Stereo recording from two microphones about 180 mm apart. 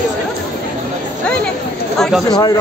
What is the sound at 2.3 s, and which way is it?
Speech, 20° left (ahead or behind).